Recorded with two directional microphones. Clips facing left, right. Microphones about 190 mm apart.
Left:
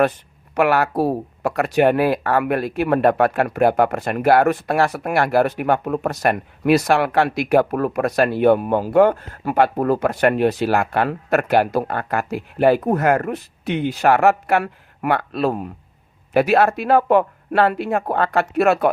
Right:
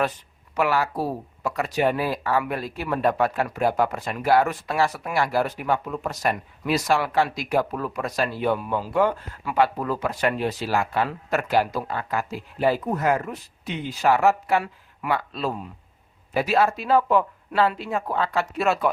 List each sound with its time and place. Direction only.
0.5 s speech: 60° left (ahead or behind)